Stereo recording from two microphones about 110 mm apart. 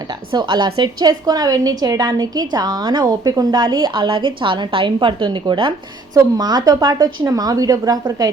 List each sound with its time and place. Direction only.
0.3 s a woman's voice: 45° right (ahead or behind)
6.1 s a woman's voice: 35° right (ahead or behind)